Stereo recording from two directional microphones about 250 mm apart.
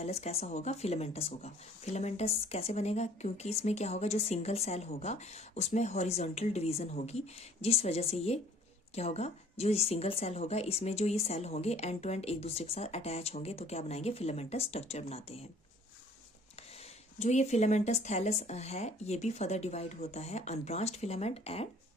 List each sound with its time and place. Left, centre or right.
0.0 s speech: left
17.2 s speech: left